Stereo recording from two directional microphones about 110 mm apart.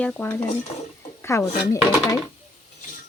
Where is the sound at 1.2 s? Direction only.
25° left (ahead or behind).